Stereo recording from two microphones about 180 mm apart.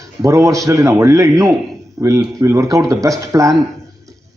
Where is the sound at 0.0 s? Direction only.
15° right (ahead or behind).